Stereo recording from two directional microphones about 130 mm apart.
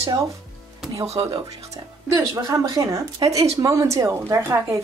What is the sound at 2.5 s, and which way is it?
Speech, 25° right (ahead or behind).